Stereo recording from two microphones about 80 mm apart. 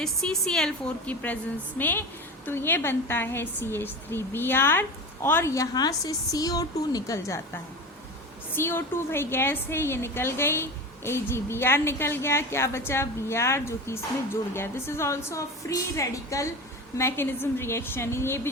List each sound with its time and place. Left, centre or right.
0.0 s a woman's voice: centre
1.0 s a woman's voice: centre
5.7 s a woman's voice: left
8.5 s a woman's voice: left
17.0 s a woman's voice: left